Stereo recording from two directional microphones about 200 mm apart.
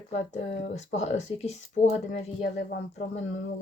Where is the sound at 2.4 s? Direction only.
55° left (ahead or behind).